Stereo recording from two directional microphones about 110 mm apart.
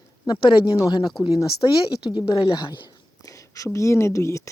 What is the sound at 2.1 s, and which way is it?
Speech, 45° left (ahead or behind).